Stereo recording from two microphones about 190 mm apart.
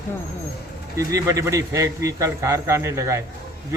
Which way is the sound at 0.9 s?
15° right (ahead or behind).